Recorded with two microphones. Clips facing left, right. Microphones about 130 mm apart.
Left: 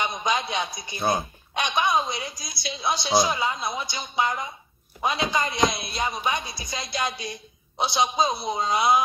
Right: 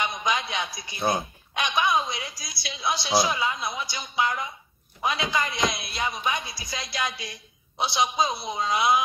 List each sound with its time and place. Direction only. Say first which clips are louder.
0.0 s a woman's voice: left 1 dB; 25° left (ahead or behind)